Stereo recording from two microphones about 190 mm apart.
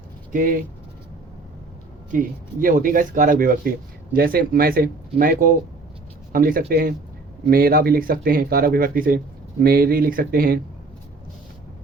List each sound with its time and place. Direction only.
0.3 s speech: 45° right (ahead or behind)
2.1 s speech: 45° right (ahead or behind)